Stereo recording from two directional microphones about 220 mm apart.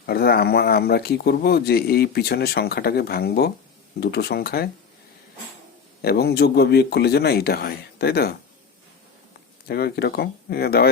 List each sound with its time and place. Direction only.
0.0 s speech: 45° left (ahead or behind)
6.0 s speech: 45° left (ahead or behind)
9.6 s speech: 45° left (ahead or behind)